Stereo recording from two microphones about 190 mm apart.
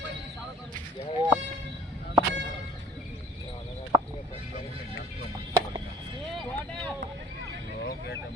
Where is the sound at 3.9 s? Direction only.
20° right (ahead or behind).